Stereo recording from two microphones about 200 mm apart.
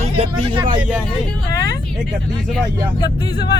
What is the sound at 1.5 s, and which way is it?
Speech, 15° left (ahead or behind).